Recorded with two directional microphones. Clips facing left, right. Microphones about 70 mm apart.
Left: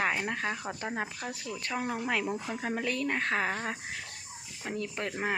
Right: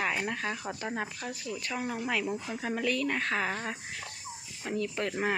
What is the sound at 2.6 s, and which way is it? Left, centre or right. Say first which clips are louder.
Speech: right 4 dB; left.